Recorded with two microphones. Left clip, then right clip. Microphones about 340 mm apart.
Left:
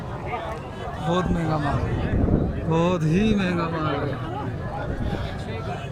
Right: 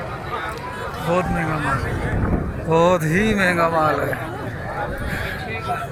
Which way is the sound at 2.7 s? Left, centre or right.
Centre.